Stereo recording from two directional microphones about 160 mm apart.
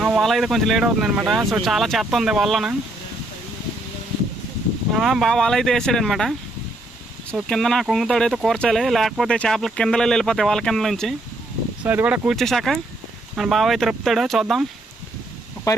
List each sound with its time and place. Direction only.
0.0 s speech: centre (ahead or behind)
4.9 s speech: centre (ahead or behind)
7.3 s speech: centre (ahead or behind)
11.8 s speech: 10° right (ahead or behind)
15.7 s speech: 20° left (ahead or behind)